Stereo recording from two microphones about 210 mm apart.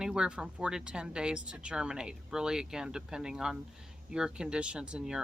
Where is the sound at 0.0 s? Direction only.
5° right (ahead or behind).